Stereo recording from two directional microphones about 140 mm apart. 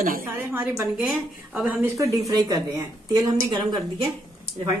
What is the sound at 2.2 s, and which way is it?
Speech, 25° right (ahead or behind).